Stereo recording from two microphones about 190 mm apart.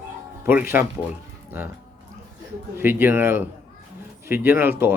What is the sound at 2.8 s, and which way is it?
Speech, 10° right (ahead or behind).